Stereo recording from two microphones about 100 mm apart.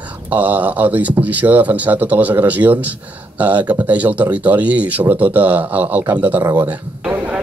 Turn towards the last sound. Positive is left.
turn(degrees=-20)  # may be behind; listen again after turning